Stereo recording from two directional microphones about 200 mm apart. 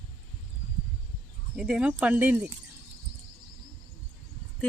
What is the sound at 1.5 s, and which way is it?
Speech, 5° right (ahead or behind).